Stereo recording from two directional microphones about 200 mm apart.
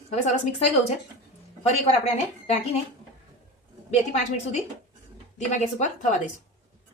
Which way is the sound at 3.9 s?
35° left (ahead or behind).